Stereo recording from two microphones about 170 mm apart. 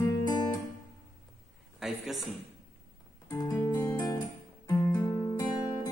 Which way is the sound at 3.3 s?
20° left (ahead or behind).